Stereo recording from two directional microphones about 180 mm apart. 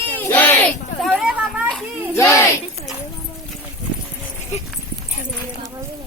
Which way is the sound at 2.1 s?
15° left (ahead or behind).